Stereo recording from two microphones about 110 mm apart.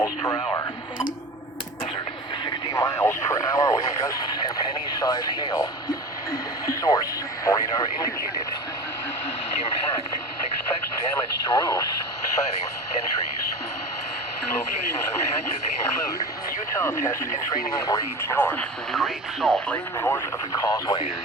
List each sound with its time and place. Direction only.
2.7 s radio: 30° left (ahead or behind)
4.9 s speech: 35° left (ahead or behind)
6.7 s radio: 35° left (ahead or behind)
11.4 s speech: 35° left (ahead or behind)
16.7 s speech: 25° left (ahead or behind)
18.3 s speech: 15° left (ahead or behind)
18.9 s speech: centre (ahead or behind)
19.6 s speech: 15° left (ahead or behind)
20.1 s speech: 25° left (ahead or behind)